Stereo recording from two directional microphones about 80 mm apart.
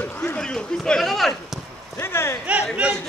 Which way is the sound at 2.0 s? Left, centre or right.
Left.